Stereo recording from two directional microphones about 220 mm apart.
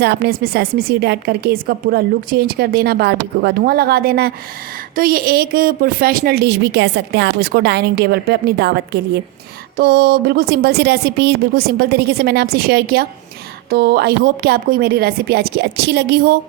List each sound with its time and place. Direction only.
0.0 s speech: 45° right (ahead or behind)